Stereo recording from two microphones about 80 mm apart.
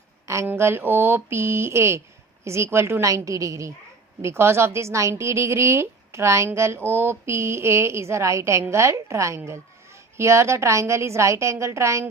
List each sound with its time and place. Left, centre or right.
0.4 s speech: right